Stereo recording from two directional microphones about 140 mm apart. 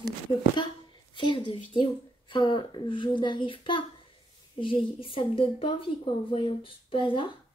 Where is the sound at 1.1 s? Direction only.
35° left (ahead or behind).